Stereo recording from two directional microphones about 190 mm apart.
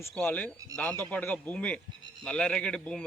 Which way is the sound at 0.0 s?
10° left (ahead or behind).